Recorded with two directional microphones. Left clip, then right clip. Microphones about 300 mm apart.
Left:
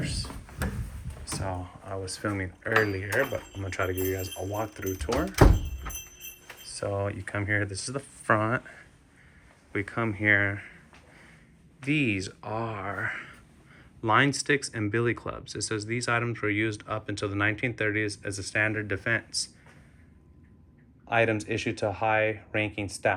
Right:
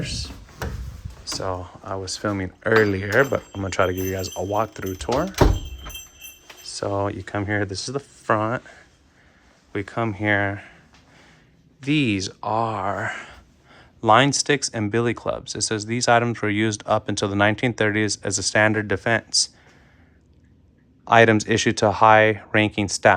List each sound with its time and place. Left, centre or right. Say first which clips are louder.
1.4 s speech: right 8 dB; centre
2.6 s speech: right 7 dB; right
3.8 s speech: right 5 dB; centre
6.7 s speech: right 6 dB; centre
9.7 s speech: right 4 dB; centre
11.9 s speech: right 5 dB; centre
21.1 s speech: right 10 dB; right